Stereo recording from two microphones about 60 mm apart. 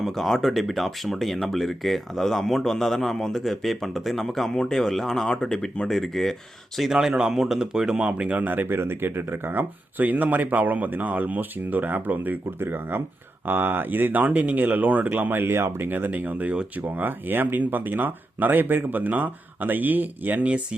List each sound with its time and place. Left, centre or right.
0.0 s speech: centre
5.9 s speech: centre; by 20.5 s right